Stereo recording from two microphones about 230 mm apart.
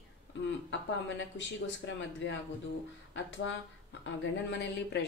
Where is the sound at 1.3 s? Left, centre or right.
Left.